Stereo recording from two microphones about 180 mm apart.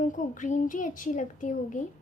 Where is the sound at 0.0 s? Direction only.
45° left (ahead or behind).